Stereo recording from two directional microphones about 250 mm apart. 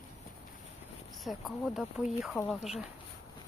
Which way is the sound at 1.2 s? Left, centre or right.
Centre.